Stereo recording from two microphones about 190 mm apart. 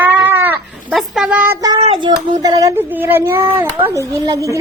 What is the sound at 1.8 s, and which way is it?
A woman's voice, 25° right (ahead or behind).